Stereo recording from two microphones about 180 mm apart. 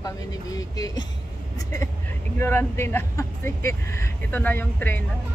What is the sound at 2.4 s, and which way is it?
Speech, 10° left (ahead or behind).